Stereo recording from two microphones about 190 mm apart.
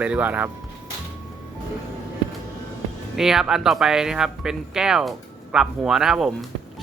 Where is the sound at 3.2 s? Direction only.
Centre (ahead or behind).